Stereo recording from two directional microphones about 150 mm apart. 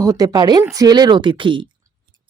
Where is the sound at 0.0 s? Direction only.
25° right (ahead or behind).